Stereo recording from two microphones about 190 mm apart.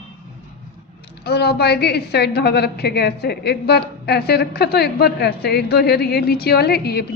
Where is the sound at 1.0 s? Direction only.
60° left (ahead or behind).